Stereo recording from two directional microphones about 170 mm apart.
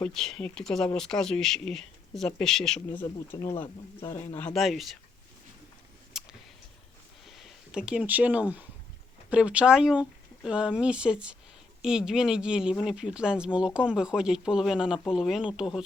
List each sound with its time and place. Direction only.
0.0 s speech: 5° left (ahead or behind)
3.3 s speech: 20° left (ahead or behind)
4.4 s speech: centre (ahead or behind)
6.1 s a sound: centre (ahead or behind)
7.3 s speech: centre (ahead or behind)